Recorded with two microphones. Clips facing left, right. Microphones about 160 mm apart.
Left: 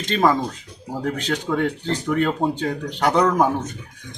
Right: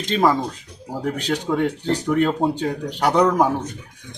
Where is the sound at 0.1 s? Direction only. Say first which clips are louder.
Even; 5° right (ahead or behind).